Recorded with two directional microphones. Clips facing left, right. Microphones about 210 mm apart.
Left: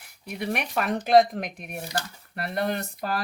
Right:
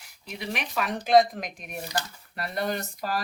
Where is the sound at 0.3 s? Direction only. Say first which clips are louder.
Left 4 dB; 55° left (ahead or behind).